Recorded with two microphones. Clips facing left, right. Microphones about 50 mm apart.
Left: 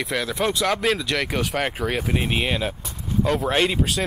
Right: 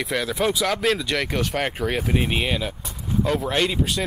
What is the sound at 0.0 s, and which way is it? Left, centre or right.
Speech, centre.